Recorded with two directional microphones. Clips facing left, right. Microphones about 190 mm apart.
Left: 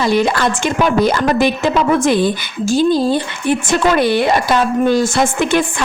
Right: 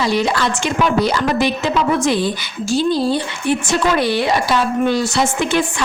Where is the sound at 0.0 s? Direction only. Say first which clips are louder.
Left 3 dB; 50° left (ahead or behind).